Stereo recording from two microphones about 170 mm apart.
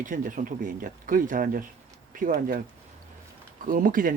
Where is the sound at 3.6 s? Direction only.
55° right (ahead or behind).